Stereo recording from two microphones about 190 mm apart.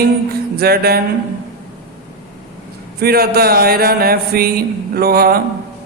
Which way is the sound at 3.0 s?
55° right (ahead or behind).